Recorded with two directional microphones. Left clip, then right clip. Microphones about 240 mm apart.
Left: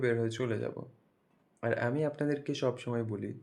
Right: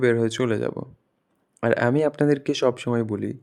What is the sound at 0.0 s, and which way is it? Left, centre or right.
Speech, right.